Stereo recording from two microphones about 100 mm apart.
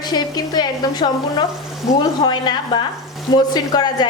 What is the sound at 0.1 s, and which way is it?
A woman's voice, 45° left (ahead or behind).